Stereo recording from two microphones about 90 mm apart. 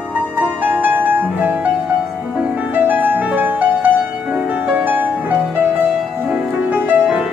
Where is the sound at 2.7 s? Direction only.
20° right (ahead or behind).